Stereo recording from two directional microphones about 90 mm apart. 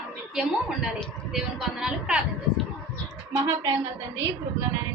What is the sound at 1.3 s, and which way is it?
Speech, 5° right (ahead or behind).